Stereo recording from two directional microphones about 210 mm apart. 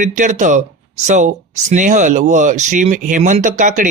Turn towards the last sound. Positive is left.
turn(degrees=-35)  # may be behind; listen again after turning